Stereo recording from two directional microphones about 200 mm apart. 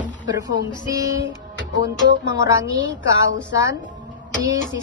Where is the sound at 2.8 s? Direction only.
70° left (ahead or behind).